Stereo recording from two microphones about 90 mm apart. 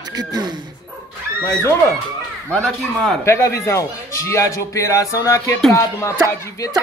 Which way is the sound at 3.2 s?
35° left (ahead or behind).